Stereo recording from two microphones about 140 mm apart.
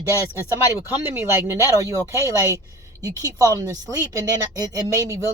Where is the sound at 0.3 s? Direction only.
15° right (ahead or behind).